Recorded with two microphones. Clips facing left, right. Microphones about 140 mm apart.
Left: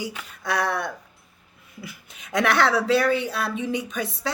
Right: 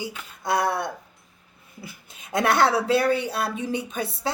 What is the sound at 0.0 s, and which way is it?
A woman's voice, 25° right (ahead or behind).